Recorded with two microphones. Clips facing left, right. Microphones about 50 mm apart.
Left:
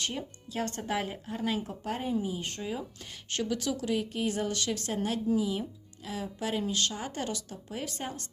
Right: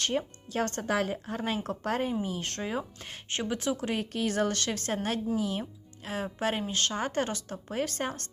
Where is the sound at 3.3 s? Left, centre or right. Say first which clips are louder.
Right 1 dB; right.